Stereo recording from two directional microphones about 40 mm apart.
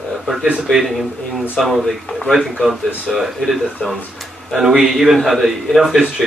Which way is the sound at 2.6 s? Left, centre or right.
Centre.